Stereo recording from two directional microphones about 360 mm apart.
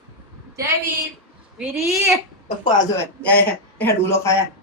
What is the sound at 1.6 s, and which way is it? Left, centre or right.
Speech, centre.